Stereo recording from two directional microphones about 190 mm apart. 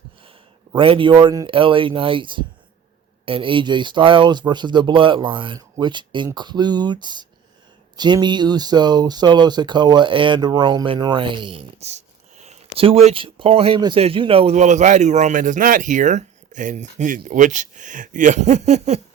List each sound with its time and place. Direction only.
0.8 s speech: 30° right (ahead or behind)